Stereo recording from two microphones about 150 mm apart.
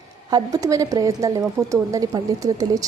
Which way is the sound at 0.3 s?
25° right (ahead or behind).